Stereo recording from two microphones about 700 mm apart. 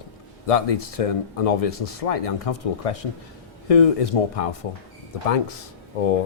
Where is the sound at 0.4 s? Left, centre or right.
Left.